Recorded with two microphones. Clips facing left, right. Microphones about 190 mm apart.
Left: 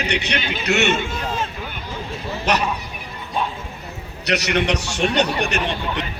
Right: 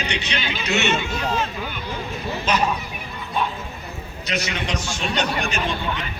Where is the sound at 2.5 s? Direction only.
70° left (ahead or behind).